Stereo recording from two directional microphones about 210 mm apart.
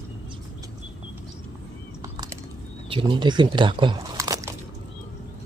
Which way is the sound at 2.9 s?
25° right (ahead or behind).